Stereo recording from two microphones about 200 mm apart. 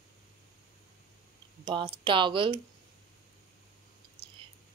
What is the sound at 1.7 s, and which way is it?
Speech, 25° right (ahead or behind).